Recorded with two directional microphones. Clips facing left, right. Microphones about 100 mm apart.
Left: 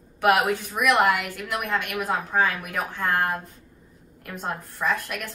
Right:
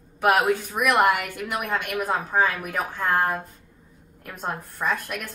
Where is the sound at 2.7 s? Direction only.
5° right (ahead or behind).